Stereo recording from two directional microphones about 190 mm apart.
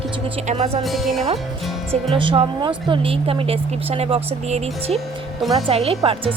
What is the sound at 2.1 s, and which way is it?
A woman's voice, 30° right (ahead or behind).